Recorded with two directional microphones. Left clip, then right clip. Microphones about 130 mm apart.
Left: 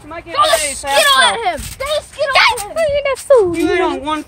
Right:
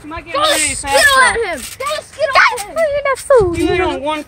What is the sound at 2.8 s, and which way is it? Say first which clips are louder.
Speech: right 1 dB; 30° left (ahead or behind).